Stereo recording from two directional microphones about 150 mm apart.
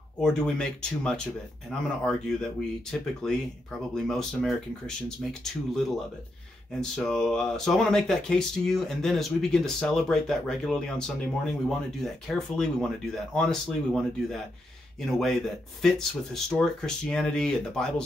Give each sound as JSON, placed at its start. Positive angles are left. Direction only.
{"t": 0.2, "sound": "speech", "side_deg": 5}